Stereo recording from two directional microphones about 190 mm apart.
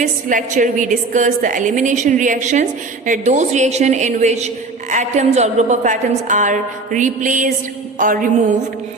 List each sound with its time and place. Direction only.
0.0 s a woman's voice: 40° right (ahead or behind)